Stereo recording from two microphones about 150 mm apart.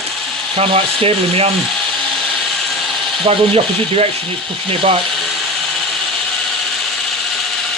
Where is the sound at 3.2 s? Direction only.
40° right (ahead or behind).